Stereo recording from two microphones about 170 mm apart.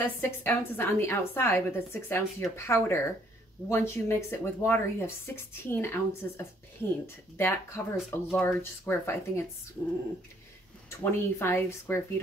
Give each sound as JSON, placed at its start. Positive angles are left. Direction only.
{"t": 0.0, "sound": "speech", "side_deg": 10}
{"t": 10.9, "sound": "speech", "side_deg": 15}